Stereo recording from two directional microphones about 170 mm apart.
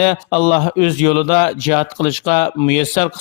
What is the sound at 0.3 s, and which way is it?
Speech, 50° left (ahead or behind).